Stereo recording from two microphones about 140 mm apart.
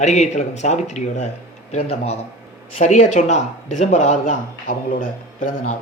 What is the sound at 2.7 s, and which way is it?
Speech, 60° left (ahead or behind).